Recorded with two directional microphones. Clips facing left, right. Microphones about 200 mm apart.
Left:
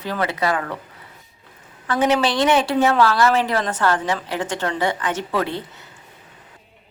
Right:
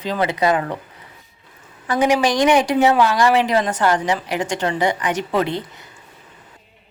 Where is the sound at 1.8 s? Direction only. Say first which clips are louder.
Right 2 dB; 10° right (ahead or behind).